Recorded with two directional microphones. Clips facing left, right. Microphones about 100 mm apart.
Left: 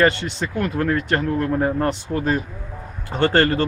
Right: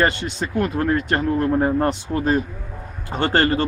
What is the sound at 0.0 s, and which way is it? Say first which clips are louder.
Speech: left 2 dB; 20° right (ahead or behind).